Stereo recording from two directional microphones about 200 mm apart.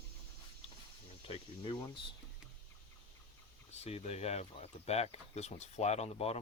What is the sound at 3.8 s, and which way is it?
Speech, 30° left (ahead or behind).